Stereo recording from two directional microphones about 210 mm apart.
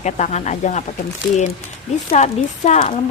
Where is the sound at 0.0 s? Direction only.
35° left (ahead or behind).